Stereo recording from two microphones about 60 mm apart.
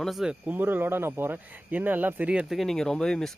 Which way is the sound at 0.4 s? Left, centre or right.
Right.